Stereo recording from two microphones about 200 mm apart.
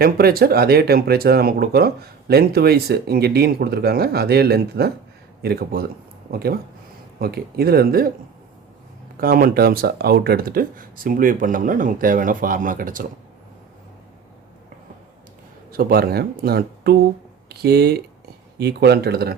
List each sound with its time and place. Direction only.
0.0 s speech: 50° right (ahead or behind)
9.1 s speech: 45° right (ahead or behind)
15.7 s speech: 50° right (ahead or behind)